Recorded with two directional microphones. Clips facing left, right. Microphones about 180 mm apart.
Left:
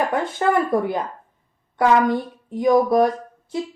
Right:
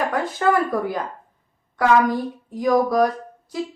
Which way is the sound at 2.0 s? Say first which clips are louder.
Left 1 dB; 25° left (ahead or behind).